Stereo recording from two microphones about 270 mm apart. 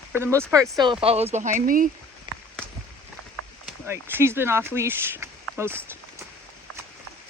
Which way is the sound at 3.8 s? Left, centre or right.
Centre.